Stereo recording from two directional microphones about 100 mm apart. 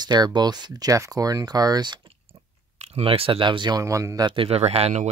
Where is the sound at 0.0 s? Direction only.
45° right (ahead or behind).